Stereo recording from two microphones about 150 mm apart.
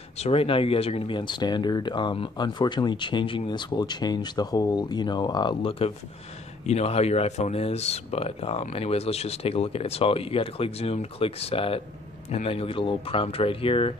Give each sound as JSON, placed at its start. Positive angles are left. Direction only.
{"t": 0.2, "sound": "speech", "side_deg": 40}